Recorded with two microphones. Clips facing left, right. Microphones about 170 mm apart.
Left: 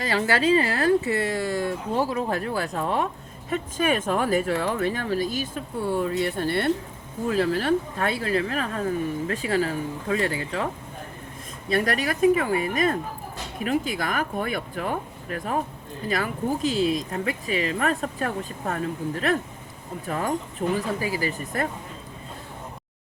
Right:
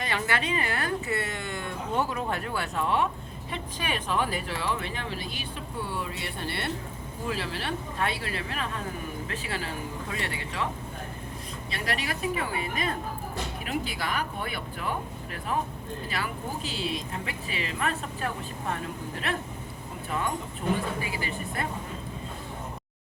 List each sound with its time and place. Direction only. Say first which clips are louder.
0.0 s speech: left 7 dB; 35° left (ahead or behind)
11.7 s speech: left 9 dB; 50° left (ahead or behind)
20.1 s speech: left 4 dB; 40° left (ahead or behind)